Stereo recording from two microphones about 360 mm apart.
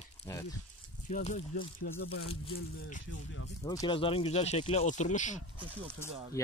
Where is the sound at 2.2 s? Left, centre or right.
Centre.